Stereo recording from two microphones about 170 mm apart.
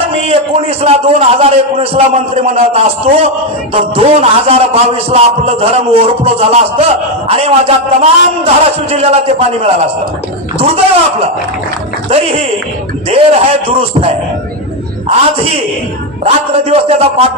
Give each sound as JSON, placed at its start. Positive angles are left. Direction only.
{"t": 0.1, "sound": "a sound", "side_deg": -35}
{"t": 0.8, "sound": "a man's voice", "side_deg": -35}
{"t": 15.0, "sound": "a man's voice", "side_deg": -35}